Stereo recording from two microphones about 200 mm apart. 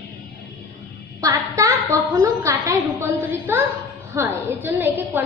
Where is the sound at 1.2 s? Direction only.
15° right (ahead or behind).